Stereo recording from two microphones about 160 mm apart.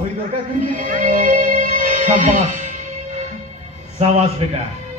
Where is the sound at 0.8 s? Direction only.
55° right (ahead or behind).